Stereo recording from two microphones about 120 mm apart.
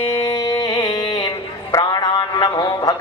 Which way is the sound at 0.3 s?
35° left (ahead or behind).